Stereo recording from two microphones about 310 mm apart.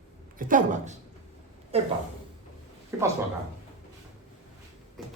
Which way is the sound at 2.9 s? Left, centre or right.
Centre.